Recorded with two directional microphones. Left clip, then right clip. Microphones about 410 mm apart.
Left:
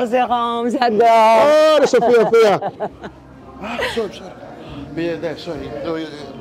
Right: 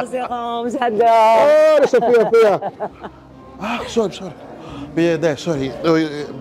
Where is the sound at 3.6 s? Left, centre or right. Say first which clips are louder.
Right 4 dB; right.